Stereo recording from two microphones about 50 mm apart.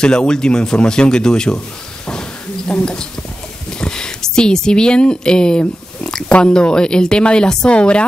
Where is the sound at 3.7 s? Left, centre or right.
Centre.